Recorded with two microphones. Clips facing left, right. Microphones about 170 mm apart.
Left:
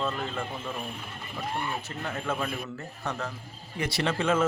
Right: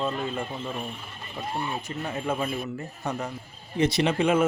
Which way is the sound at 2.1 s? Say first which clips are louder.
Right 3 dB; 15° right (ahead or behind).